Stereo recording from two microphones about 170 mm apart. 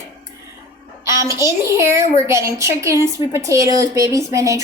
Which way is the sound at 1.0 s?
15° right (ahead or behind).